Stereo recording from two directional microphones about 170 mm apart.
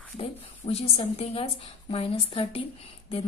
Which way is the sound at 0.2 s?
35° left (ahead or behind).